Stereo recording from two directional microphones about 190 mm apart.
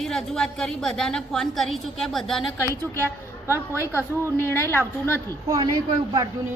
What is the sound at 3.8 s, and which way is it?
A woman's voice, 15° left (ahead or behind).